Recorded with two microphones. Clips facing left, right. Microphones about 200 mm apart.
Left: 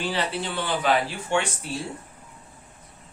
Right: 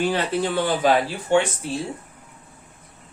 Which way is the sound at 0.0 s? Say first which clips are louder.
Right 6 dB; 45° right (ahead or behind).